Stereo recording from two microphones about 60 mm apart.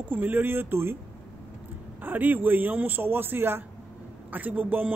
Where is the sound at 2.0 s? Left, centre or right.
Right.